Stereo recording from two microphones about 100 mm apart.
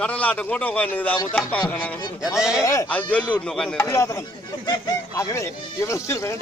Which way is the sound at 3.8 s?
30° left (ahead or behind).